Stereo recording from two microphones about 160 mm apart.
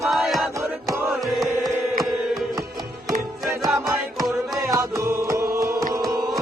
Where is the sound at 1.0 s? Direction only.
Centre (ahead or behind).